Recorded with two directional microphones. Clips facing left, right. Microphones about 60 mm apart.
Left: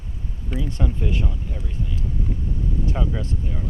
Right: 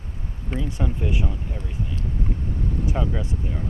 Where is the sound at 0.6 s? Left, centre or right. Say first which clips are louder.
Even; centre.